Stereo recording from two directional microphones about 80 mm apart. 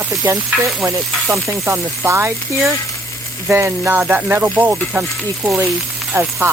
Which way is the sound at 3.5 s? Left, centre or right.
Right.